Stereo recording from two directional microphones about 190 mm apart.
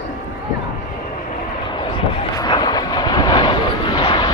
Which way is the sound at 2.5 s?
20° left (ahead or behind).